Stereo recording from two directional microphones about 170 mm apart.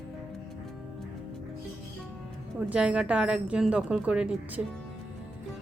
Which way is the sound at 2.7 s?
5° right (ahead or behind).